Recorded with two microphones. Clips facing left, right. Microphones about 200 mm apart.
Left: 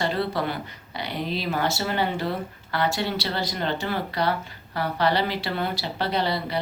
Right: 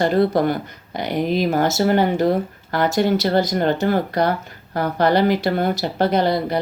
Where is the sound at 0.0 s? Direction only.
45° right (ahead or behind).